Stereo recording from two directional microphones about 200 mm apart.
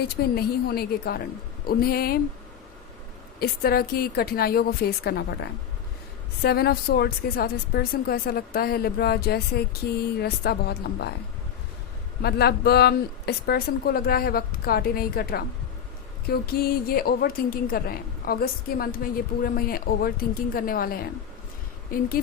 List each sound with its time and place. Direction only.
0.2 s a woman's voice: 50° left (ahead or behind)
3.4 s a woman's voice: 50° left (ahead or behind)
12.2 s a woman's voice: 50° left (ahead or behind)